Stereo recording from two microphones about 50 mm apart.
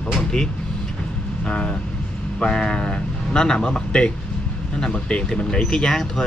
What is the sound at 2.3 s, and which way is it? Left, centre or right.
Speech, centre.